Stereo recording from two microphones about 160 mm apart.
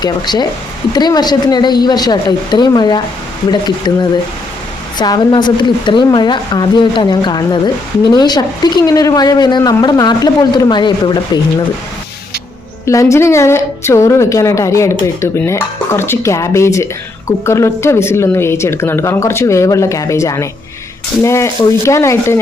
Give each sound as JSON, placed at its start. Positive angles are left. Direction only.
{"t": 0.0, "sound": "a woman's voice", "side_deg": 25}
{"t": 12.8, "sound": "a woman's voice", "side_deg": 20}